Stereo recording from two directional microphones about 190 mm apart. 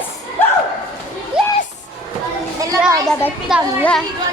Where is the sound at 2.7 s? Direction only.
20° right (ahead or behind).